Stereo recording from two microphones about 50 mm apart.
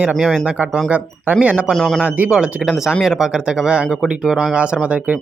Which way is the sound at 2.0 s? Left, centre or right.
Right.